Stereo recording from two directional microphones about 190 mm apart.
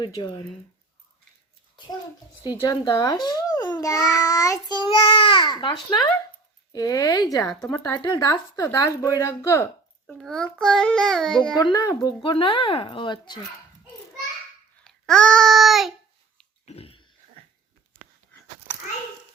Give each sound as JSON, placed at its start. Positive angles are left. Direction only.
{"t": 0.0, "sound": "a child's voice", "side_deg": 25}
{"t": 2.5, "sound": "a child's voice", "side_deg": 20}
{"t": 7.5, "sound": "a child's voice", "side_deg": 5}
{"t": 7.9, "sound": "speech", "side_deg": 20}
{"t": 10.1, "sound": "a child's voice", "side_deg": 0}
{"t": 11.6, "sound": "a child's voice", "side_deg": 20}
{"t": 14.8, "sound": "babbling", "side_deg": 5}
{"t": 16.6, "sound": "a sound", "side_deg": 30}